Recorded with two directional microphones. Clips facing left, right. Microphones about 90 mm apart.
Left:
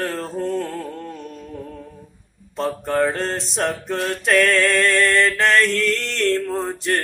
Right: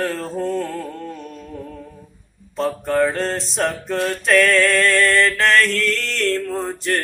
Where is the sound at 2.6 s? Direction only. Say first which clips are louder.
Right 1 dB; 20° left (ahead or behind).